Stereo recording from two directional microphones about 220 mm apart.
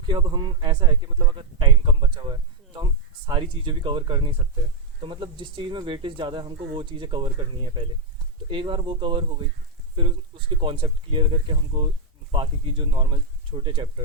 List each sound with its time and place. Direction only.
0.1 s a man's voice: 20° right (ahead or behind)